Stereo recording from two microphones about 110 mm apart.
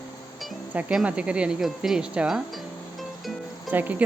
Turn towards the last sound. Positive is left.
turn(degrees=-15)  # may be behind; listen again after turning